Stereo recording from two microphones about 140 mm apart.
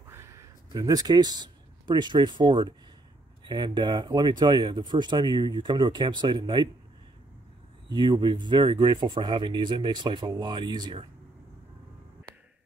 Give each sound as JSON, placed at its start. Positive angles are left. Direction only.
{"t": 0.1, "sound": "speech", "side_deg": -20}
{"t": 7.9, "sound": "speech", "side_deg": -35}